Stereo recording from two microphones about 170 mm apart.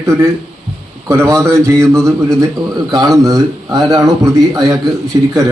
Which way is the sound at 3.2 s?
20° right (ahead or behind).